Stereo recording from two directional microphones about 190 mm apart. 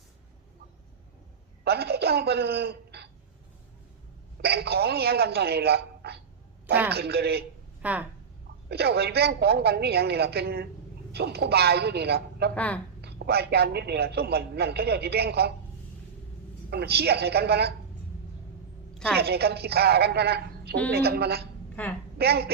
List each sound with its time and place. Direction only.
1.6 s a sound: 55° right (ahead or behind)
4.4 s a man's voice: 60° right (ahead or behind)
7.8 s speech: 10° right (ahead or behind)
8.7 s a man's voice: 55° right (ahead or behind)
12.5 s speech: 5° left (ahead or behind)
13.0 s a man's voice: 60° right (ahead or behind)
16.6 s a man's voice: 60° right (ahead or behind)
19.1 s a man's voice: 55° right (ahead or behind)
21.8 s speech: 10° left (ahead or behind)
22.2 s a man's voice: 55° right (ahead or behind)